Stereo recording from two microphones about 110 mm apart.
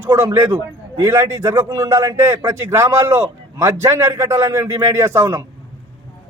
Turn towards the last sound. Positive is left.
turn(degrees=-25)  # may be behind; listen again after turning